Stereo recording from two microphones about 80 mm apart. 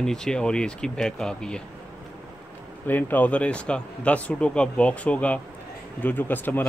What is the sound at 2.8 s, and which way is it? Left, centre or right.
Speech, left.